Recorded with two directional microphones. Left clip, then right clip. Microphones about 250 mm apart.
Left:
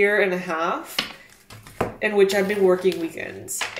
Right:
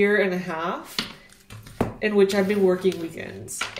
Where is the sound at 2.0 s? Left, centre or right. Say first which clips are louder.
Left 1 dB; centre.